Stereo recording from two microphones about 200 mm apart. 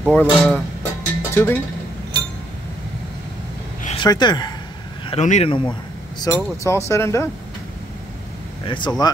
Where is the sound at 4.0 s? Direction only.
20° left (ahead or behind).